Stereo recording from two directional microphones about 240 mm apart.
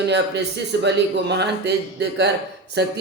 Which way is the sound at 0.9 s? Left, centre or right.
Right.